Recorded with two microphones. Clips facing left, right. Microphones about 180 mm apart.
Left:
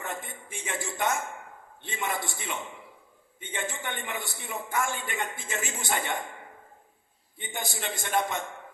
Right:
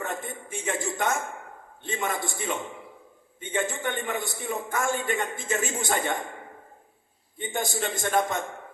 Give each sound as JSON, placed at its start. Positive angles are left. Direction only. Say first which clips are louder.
{"t": 0.0, "sound": "a sound", "louder": "right 4 dB", "side_deg": -50}
{"t": 1.8, "sound": "a man's voice", "louder": "right 3 dB", "side_deg": -50}
{"t": 7.3, "sound": "a man's voice", "louder": "right 7 dB", "side_deg": -50}